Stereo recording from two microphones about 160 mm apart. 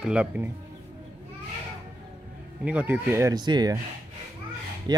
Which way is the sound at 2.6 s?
10° right (ahead or behind).